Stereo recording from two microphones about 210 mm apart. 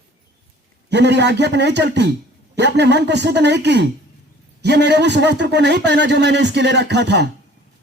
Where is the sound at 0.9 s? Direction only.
55° right (ahead or behind).